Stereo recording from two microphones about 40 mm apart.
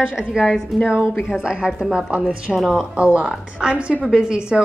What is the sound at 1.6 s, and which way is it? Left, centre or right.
Speech, centre.